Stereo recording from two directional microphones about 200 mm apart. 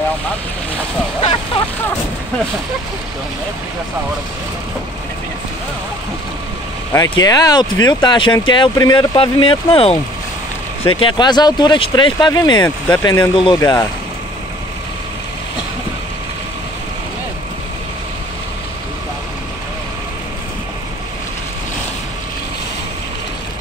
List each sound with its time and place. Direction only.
6.9 s speech: 20° left (ahead or behind)
12.6 s speech: 10° left (ahead or behind)